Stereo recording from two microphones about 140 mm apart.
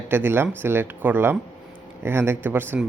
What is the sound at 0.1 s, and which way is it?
Speech, 15° right (ahead or behind).